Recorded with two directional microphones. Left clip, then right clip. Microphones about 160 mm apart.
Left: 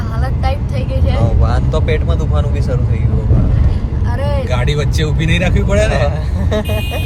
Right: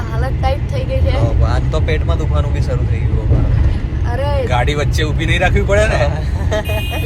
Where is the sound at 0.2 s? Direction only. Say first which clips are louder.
Right 2 dB; 5° right (ahead or behind).